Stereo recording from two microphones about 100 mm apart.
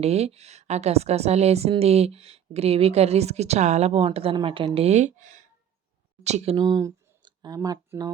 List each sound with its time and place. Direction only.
0.0 s a woman's voice: 90° right; by 4.4 s 75° right (ahead or behind)
4.4 s a woman's voice: 60° right (ahead or behind); by 4.9 s 80° right
6.2 s speech: 85° right
6.6 s speech: 45° right (ahead or behind)
7.2 s a sound: 45° right (ahead or behind)